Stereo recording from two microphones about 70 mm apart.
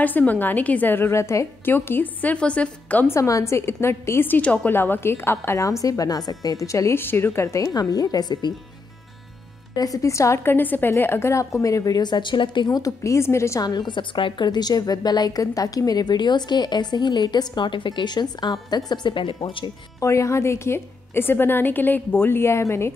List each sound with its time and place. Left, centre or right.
0.0 s a woman's voice: left
1.7 s a woman's voice: left
2.3 s speech: centre
3.1 s a woman's voice: left
5.6 s a woman's voice: left
7.0 s a woman's voice: left
7.7 s a woman's voice: left
9.8 s a woman's voice: left
10.4 s a woman's voice: left
12.8 s a woman's voice: left
13.6 s a woman's voice: left
15.4 s a woman's voice: left
20.0 s a woman's voice: left